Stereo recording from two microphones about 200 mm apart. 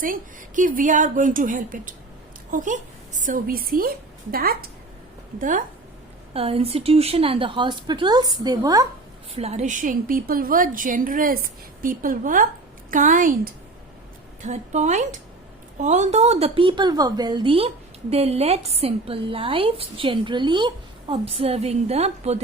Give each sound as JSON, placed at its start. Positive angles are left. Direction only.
{"t": 0.0, "sound": "a woman's voice", "side_deg": -40}
{"t": 6.3, "sound": "a woman's voice", "side_deg": -30}
{"t": 9.3, "sound": "a woman's voice", "side_deg": -30}